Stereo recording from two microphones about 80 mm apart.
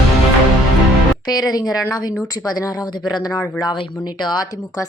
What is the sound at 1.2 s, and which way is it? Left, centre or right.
Speech, left.